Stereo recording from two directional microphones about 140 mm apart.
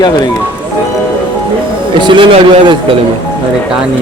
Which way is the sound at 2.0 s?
35° right (ahead or behind).